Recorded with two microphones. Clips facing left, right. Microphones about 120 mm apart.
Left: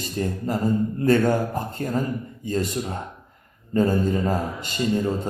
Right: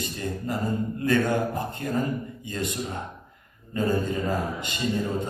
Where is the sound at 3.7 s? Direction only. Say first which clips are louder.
Left 5 dB; 45° left (ahead or behind).